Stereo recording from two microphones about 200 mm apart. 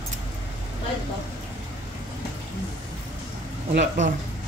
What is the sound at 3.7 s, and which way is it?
Speech, 35° right (ahead or behind).